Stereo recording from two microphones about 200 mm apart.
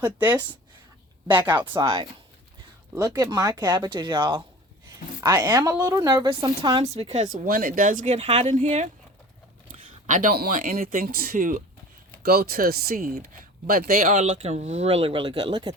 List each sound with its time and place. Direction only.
0.2 s speech: 10° right (ahead or behind)
1.6 s speech: 20° right (ahead or behind); by 7.3 s 35° right (ahead or behind)
7.4 s speech: 45° right (ahead or behind)
14.2 s speech: 35° right (ahead or behind)